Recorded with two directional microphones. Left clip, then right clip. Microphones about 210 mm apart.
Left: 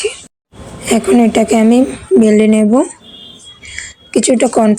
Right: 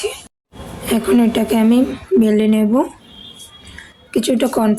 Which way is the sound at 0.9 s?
20° left (ahead or behind).